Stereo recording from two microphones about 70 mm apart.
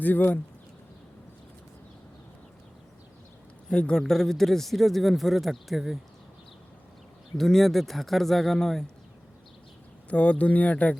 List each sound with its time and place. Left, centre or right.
0.0 s speech: left
3.7 s speech: centre
7.3 s speech: centre
10.1 s speech: centre